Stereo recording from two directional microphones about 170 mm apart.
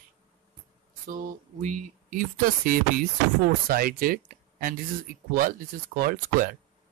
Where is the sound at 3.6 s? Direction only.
60° right (ahead or behind).